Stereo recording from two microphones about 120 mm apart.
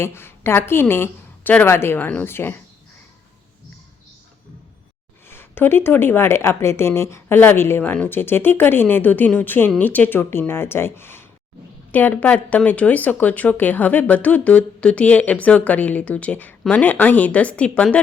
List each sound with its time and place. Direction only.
0.0 s speech: 20° left (ahead or behind)
5.3 s speech: 20° left (ahead or behind)